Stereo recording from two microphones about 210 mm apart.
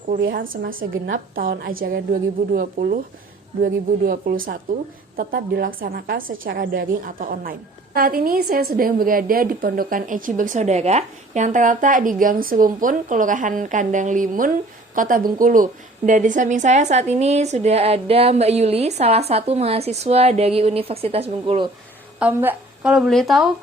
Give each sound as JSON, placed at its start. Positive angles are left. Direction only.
{"t": 0.3, "sound": "a woman's voice", "side_deg": -40}
{"t": 22.2, "sound": "a woman's voice", "side_deg": -10}